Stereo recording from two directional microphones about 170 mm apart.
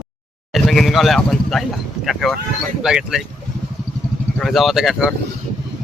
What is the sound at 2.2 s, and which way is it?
Speech, centre (ahead or behind).